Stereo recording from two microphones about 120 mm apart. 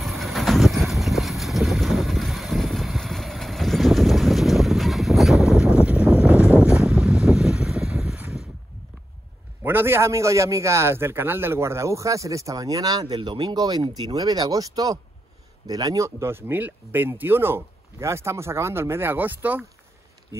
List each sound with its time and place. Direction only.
0.0 s vehicle: centre (ahead or behind)
9.6 s a man's voice: 20° right (ahead or behind)